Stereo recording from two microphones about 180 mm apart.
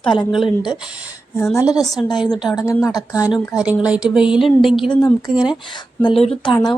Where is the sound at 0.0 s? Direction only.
25° left (ahead or behind).